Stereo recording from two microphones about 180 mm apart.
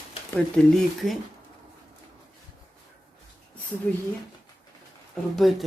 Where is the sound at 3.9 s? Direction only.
5° left (ahead or behind).